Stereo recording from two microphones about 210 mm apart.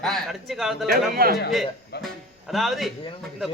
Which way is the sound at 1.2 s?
45° right (ahead or behind).